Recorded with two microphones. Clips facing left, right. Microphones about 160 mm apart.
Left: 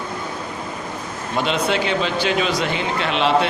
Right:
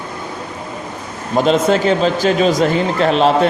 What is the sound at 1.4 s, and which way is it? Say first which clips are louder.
A man's voice: right 7 dB; 45° right (ahead or behind).